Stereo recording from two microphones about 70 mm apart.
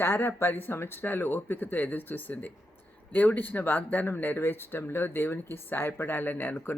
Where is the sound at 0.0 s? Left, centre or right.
Left.